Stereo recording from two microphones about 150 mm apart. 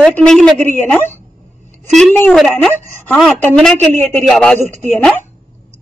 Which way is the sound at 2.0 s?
10° left (ahead or behind).